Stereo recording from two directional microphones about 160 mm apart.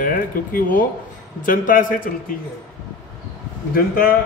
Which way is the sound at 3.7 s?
65° left (ahead or behind).